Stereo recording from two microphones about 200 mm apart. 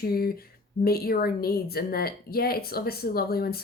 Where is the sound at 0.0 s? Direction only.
50° left (ahead or behind).